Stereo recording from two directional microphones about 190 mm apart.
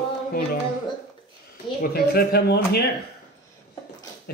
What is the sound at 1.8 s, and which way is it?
Speech, 55° left (ahead or behind).